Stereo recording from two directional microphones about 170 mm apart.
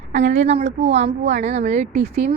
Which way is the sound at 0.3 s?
40° right (ahead or behind).